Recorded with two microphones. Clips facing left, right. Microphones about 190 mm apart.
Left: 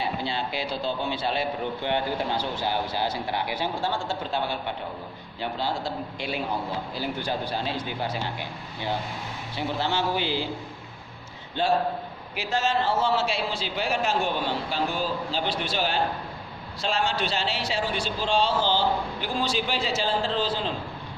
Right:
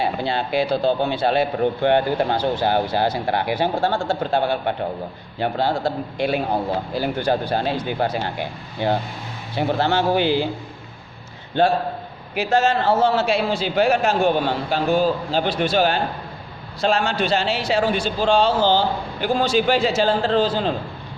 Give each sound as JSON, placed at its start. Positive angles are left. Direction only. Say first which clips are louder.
{"t": 0.0, "sound": "speech", "louder": "right 6 dB", "side_deg": -60}
{"t": 11.6, "sound": "a man's voice", "louder": "right 5 dB", "side_deg": -60}